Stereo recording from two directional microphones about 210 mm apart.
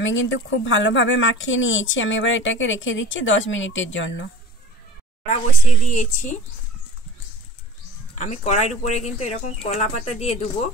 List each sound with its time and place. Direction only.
0.0 s speech: 65° left (ahead or behind)
5.9 s speech: 35° left (ahead or behind)
8.1 s speech: 30° left (ahead or behind)